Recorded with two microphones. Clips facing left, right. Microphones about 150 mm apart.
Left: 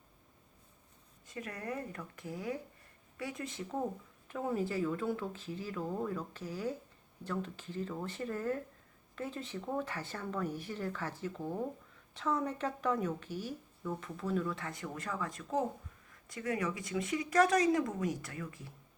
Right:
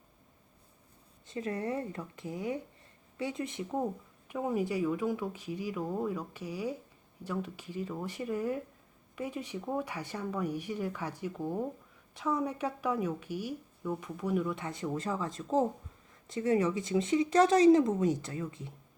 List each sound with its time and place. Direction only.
1.3 s speech: 25° right (ahead or behind)